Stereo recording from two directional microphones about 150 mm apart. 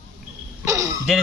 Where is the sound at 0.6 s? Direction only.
20° right (ahead or behind).